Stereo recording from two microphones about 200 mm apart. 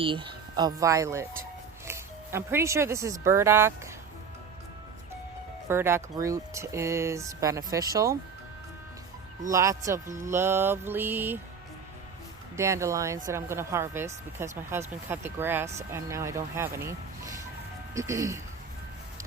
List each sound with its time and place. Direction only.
0.0 s a woman's voice: 25° right (ahead or behind)
5.6 s a woman's voice: 10° right (ahead or behind)
9.5 s a woman's voice: 15° right (ahead or behind)
12.5 s a woman's voice: 15° right (ahead or behind)
17.9 s a woman's voice: 15° right (ahead or behind)